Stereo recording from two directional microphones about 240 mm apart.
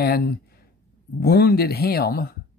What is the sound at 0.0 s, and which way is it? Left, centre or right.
Speech, left.